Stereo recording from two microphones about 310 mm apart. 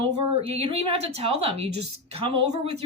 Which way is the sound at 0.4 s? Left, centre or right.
Centre.